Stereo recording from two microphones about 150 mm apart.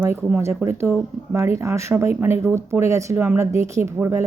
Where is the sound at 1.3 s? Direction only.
20° right (ahead or behind).